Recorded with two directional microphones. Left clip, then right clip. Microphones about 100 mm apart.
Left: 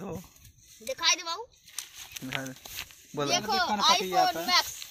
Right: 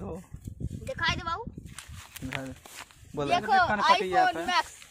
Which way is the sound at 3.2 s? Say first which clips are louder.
Right 4 dB; centre (ahead or behind).